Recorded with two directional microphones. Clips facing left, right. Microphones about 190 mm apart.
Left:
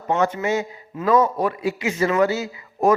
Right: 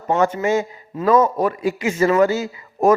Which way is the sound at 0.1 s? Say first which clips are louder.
Right 3 dB; 45° right (ahead or behind).